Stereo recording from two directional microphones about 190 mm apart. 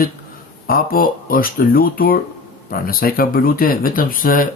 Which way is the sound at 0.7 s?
50° left (ahead or behind).